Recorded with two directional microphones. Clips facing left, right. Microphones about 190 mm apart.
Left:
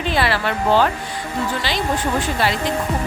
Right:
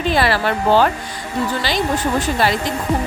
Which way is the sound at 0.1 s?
40° right (ahead or behind).